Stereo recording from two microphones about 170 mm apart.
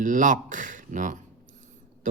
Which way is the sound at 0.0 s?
50° right (ahead or behind).